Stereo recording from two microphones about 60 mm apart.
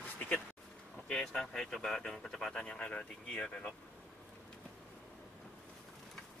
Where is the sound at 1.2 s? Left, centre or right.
Centre.